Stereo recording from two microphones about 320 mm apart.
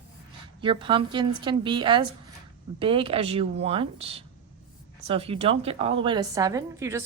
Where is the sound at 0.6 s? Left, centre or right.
Centre.